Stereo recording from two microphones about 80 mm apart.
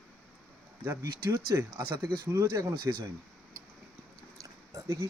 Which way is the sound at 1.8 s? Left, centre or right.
Right.